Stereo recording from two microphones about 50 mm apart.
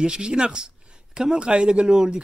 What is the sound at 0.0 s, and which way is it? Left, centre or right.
Speech, centre.